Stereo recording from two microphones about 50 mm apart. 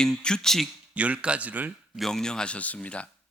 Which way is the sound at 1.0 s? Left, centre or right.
Right.